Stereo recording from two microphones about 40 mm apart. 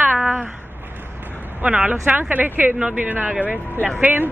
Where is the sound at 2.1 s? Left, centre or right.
Right.